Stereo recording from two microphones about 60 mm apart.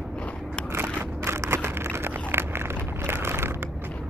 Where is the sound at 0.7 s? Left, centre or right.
Right.